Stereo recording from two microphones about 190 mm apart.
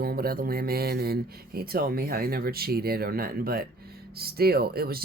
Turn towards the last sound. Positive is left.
turn(degrees=-55)  # may be behind; listen again after turning